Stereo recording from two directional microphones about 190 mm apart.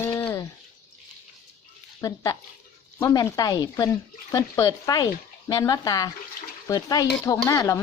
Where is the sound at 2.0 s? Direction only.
20° left (ahead or behind).